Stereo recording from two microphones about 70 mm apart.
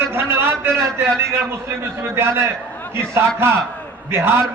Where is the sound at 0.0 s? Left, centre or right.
Right.